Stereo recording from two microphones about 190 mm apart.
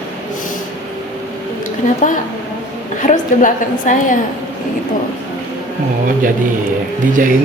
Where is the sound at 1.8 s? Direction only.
45° left (ahead or behind).